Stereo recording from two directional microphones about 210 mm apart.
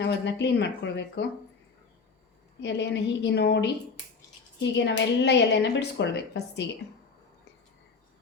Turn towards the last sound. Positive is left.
turn(degrees=55)  # may be behind; listen again after turning